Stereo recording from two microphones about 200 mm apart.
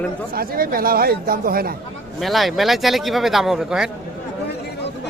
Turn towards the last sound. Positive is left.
turn(degrees=-5)  # may be behind; listen again after turning